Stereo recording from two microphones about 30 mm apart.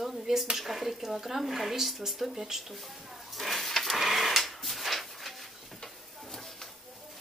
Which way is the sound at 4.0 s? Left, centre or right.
Centre.